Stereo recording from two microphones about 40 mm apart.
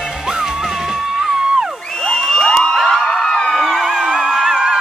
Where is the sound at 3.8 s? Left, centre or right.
Centre.